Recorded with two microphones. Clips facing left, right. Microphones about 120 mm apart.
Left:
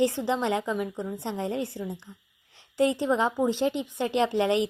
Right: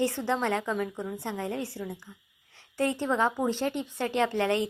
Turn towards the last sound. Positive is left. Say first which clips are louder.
# left 2 dB
turn(degrees=20)  # may be behind; listen again after turning